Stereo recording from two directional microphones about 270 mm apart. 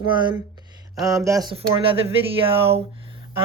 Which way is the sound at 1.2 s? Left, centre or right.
Centre.